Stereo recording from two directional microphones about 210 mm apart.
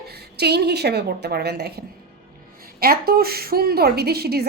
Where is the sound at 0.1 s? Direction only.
50° right (ahead or behind).